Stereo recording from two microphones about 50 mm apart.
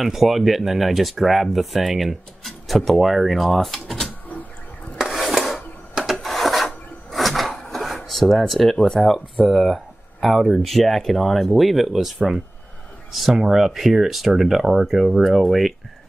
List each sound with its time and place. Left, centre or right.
0.0 s speech: centre
4.9 s rub: centre
6.2 s filing: centre
7.7 s speech: centre